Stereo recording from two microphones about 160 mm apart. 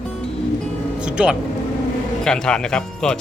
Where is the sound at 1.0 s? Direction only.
5° right (ahead or behind).